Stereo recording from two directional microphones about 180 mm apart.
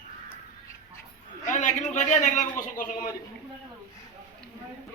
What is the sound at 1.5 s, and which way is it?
A man's voice, 45° left (ahead or behind).